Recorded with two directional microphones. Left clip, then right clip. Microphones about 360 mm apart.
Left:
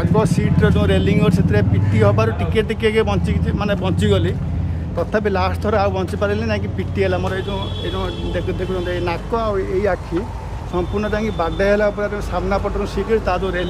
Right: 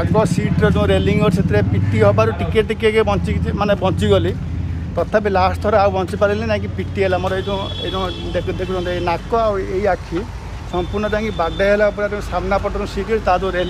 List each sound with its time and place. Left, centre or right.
0.1 s speech: centre